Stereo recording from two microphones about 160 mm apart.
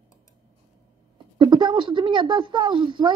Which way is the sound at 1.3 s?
30° right (ahead or behind).